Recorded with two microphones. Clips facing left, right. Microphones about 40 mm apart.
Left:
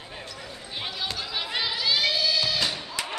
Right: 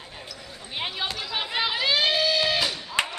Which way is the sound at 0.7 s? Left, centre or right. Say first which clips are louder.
Right 3 dB; right.